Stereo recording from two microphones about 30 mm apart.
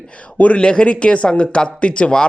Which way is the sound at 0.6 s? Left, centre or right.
Left.